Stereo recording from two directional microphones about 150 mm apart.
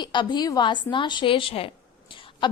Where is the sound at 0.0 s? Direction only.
30° left (ahead or behind).